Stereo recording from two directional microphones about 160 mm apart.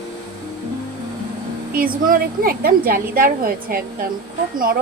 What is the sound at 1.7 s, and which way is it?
A woman's voice, 65° right (ahead or behind).